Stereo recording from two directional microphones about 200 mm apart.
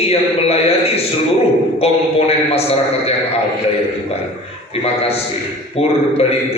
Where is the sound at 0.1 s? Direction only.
30° left (ahead or behind).